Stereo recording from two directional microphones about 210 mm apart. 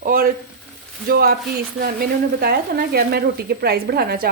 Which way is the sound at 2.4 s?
45° right (ahead or behind).